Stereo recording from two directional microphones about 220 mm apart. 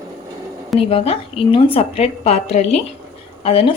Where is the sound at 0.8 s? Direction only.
25° left (ahead or behind).